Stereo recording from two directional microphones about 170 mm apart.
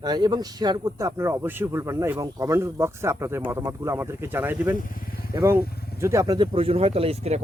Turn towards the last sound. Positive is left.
turn(degrees=-35)  # may be behind; listen again after turning